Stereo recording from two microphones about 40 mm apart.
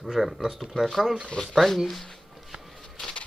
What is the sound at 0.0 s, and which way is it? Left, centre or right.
Speech, centre.